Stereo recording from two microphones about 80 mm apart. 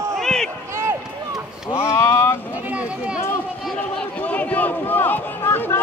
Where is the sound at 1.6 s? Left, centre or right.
Left.